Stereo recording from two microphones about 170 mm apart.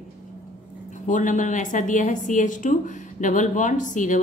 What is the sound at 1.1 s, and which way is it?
A woman's voice, 50° left (ahead or behind).